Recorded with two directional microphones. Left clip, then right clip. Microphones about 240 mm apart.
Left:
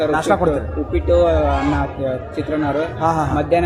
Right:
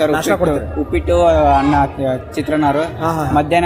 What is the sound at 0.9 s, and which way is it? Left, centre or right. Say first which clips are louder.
Speech: right 2 dB; right.